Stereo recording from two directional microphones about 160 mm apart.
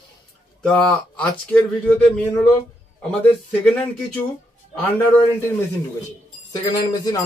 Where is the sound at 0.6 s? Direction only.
5° left (ahead or behind).